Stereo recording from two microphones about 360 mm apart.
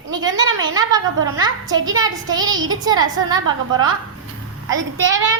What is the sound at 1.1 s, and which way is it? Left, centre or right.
Speech, right.